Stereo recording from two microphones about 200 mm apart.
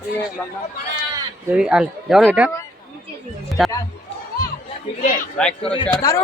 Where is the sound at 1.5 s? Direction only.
5° right (ahead or behind).